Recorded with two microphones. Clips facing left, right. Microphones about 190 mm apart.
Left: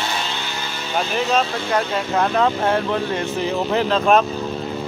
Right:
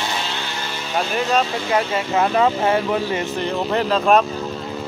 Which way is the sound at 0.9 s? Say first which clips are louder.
Even; centre (ahead or behind).